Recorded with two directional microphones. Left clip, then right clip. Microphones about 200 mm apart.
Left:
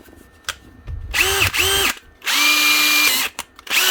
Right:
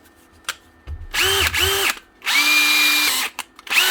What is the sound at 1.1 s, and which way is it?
Drill, 10° left (ahead or behind).